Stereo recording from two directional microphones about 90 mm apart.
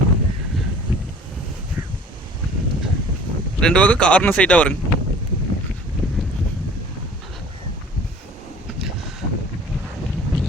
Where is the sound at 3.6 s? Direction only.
10° left (ahead or behind).